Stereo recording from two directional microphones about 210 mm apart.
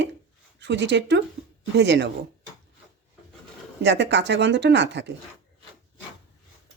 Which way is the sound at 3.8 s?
55° right (ahead or behind).